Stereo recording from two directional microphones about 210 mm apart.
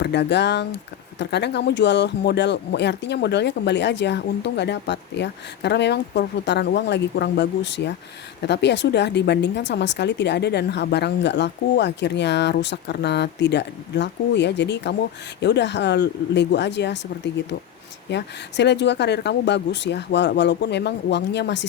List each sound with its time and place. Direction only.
0.0 s speech: 55° left (ahead or behind)
18.1 s speech: 55° left (ahead or behind)